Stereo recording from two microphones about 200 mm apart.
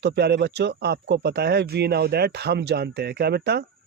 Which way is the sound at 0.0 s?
55° right (ahead or behind).